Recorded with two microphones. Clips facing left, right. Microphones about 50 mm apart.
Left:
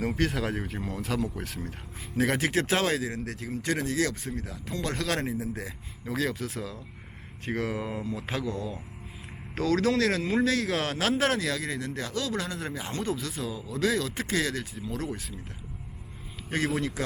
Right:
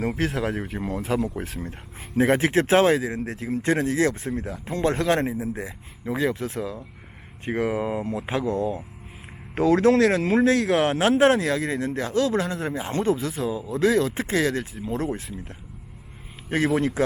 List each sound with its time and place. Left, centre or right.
0.1 s speech: centre
9.6 s speech: centre
16.7 s speech: right